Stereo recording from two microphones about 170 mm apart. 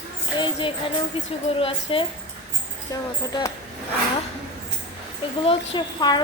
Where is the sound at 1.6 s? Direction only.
30° left (ahead or behind).